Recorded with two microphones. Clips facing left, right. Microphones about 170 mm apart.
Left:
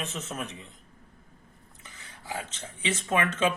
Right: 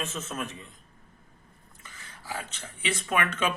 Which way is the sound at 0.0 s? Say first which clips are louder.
Right 1 dB; 20° left (ahead or behind).